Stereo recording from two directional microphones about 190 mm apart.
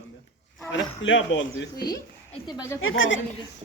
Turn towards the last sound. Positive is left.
turn(degrees=90)